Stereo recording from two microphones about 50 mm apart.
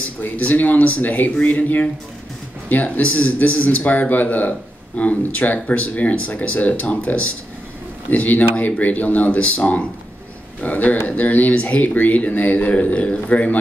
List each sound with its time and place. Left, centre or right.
0.2 s a man's voice: left